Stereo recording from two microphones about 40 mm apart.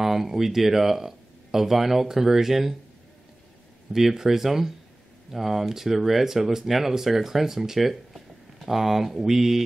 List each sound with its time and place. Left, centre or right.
0.0 s speech: centre
3.9 s speech: centre